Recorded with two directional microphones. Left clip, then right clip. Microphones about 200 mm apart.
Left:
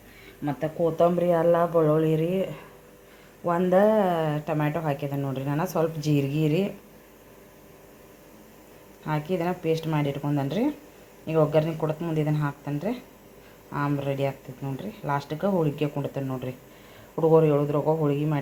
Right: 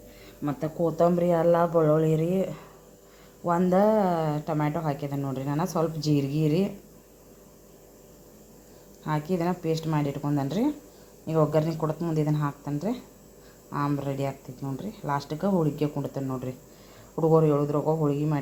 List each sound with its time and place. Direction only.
0.4 s speech: centre (ahead or behind)
9.0 s speech: centre (ahead or behind)